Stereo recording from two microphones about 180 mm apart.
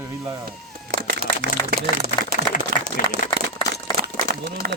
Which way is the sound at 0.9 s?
75° right (ahead or behind).